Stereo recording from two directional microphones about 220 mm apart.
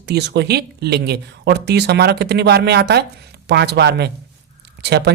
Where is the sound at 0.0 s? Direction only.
50° right (ahead or behind).